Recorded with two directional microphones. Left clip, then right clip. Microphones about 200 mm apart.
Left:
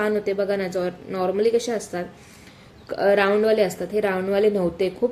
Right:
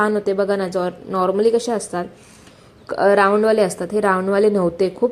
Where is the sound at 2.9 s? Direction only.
20° right (ahead or behind).